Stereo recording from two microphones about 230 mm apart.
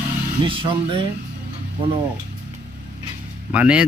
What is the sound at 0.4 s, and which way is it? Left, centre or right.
Speech, right.